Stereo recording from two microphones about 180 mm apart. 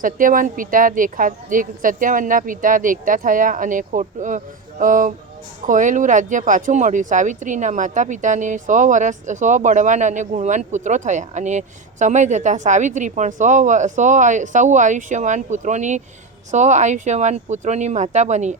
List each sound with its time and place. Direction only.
0.0 s speech: 50° right (ahead or behind)